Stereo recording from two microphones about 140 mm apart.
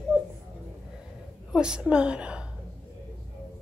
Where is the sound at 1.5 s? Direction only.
5° right (ahead or behind).